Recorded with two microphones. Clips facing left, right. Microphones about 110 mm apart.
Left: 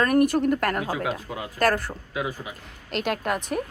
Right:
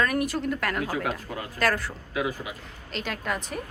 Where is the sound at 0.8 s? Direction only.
15° left (ahead or behind).